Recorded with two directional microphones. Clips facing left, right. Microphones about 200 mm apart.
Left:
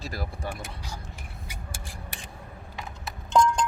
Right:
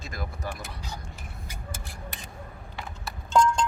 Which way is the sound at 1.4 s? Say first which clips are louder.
Right 2 dB; 15° left (ahead or behind).